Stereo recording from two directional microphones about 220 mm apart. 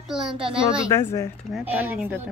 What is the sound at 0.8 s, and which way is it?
Speech, 15° left (ahead or behind).